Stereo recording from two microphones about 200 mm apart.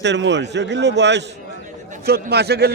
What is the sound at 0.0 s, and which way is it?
A man's voice, 60° right (ahead or behind).